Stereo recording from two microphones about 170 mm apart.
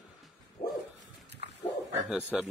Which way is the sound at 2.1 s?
5° right (ahead or behind).